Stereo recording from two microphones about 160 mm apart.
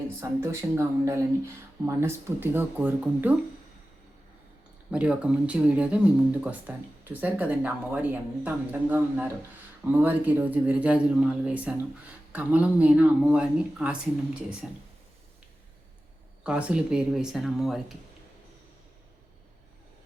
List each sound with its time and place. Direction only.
0.2 s speech: 15° right (ahead or behind)
4.9 s speech: 5° right (ahead or behind)
16.4 s speech: 5° right (ahead or behind)